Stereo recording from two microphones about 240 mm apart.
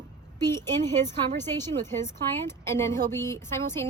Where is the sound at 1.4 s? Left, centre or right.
Centre.